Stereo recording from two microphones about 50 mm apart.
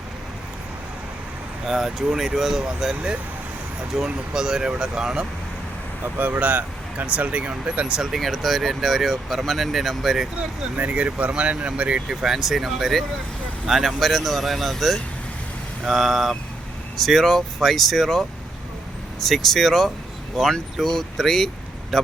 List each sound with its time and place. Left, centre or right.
1.6 s speech: centre
6.1 s speech: right
8.1 s speech: centre
10.8 s speech: right
12.0 s speech: centre